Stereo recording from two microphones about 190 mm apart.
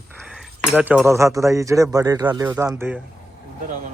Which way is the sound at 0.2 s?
Centre (ahead or behind).